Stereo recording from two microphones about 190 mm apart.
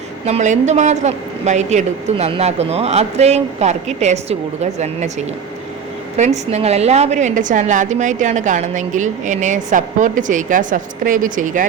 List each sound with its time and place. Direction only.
0.3 s a woman's voice: 35° right (ahead or behind)